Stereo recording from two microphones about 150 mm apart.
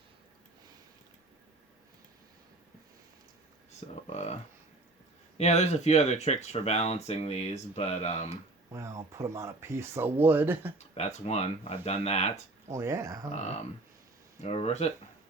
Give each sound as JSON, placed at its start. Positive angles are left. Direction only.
{"t": 3.8, "sound": "speech", "side_deg": 45}
{"t": 5.4, "sound": "speech", "side_deg": 50}
{"t": 8.7, "sound": "speech", "side_deg": -20}
{"t": 10.8, "sound": "speech", "side_deg": 45}
{"t": 12.7, "sound": "speech", "side_deg": -20}
{"t": 14.4, "sound": "speech", "side_deg": 45}